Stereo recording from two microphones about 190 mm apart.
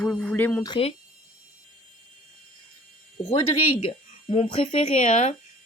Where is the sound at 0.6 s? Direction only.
30° left (ahead or behind).